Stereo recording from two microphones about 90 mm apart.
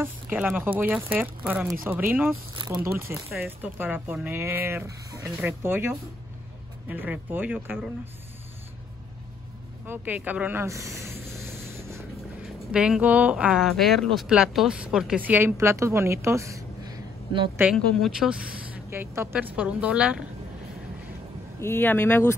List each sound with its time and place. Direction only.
0.0 s speech: 20° right (ahead or behind)
5.6 s speech: 25° right (ahead or behind)
9.8 s speech: 20° right (ahead or behind)
10.7 s a sound: 35° right (ahead or behind)
12.7 s speech: 10° right (ahead or behind)
13.7 s speech: centre (ahead or behind)
15.1 s speech: 20° right (ahead or behind)
15.5 s a woman's voice: 30° right (ahead or behind)
17.7 s speech: 5° left (ahead or behind)
18.9 s speech: 25° right (ahead or behind); by 20.2 s 10° right (ahead or behind)
21.5 s speech: 25° left (ahead or behind)